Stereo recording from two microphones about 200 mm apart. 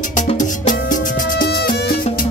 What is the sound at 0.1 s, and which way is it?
Music, 40° left (ahead or behind).